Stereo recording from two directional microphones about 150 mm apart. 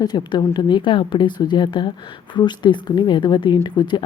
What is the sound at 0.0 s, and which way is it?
A woman's voice, 30° left (ahead or behind).